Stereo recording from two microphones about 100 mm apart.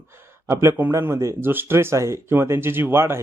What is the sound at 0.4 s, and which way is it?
Speech, 25° right (ahead or behind).